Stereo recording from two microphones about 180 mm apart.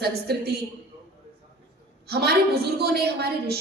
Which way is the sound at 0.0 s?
60° right (ahead or behind).